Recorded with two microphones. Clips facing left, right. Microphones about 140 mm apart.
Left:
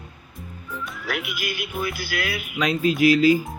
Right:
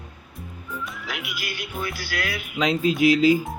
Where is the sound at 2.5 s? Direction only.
20° right (ahead or behind).